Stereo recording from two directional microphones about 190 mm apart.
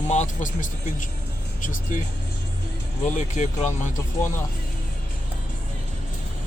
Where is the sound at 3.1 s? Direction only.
40° left (ahead or behind).